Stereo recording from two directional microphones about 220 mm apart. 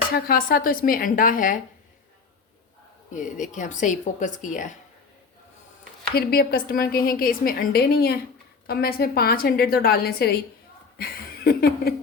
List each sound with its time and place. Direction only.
0.1 s speech: 40° left (ahead or behind)
3.1 s speech: 35° left (ahead or behind)
6.1 s a woman's voice: 45° left (ahead or behind)
10.9 s a sound: 45° left (ahead or behind)